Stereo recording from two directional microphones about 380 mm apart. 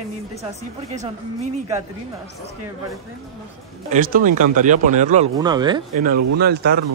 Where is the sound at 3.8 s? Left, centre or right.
Right.